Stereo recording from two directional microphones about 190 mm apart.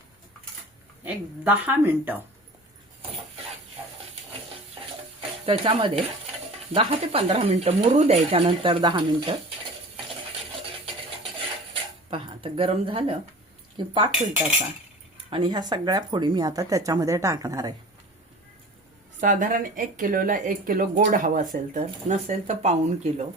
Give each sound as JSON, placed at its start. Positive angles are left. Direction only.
{"t": 1.0, "sound": "a woman's voice", "side_deg": -10}
{"t": 5.5, "sound": "speech", "side_deg": -30}
{"t": 11.7, "sound": "speech", "side_deg": -30}
{"t": 15.3, "sound": "speech", "side_deg": -25}
{"t": 19.2, "sound": "speech", "side_deg": -40}